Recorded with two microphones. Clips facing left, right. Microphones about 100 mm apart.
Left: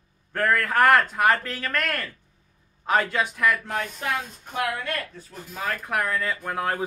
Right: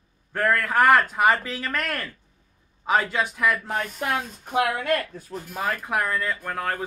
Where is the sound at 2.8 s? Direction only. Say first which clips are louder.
Even; 5° right (ahead or behind).